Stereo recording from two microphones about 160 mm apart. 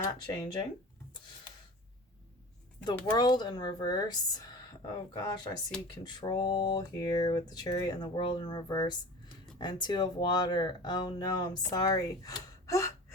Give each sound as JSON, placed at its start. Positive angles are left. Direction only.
{"t": 0.0, "sound": "speech", "side_deg": 30}
{"t": 3.1, "sound": "speech", "side_deg": 25}